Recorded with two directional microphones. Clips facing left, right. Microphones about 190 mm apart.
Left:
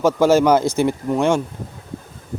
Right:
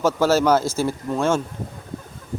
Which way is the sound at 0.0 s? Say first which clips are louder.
Left 4 dB; 15° left (ahead or behind).